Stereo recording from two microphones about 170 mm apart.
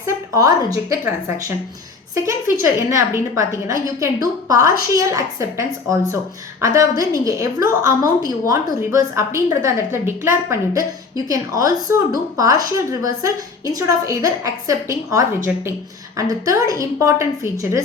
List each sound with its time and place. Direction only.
0.0 s a woman's voice: 20° right (ahead or behind)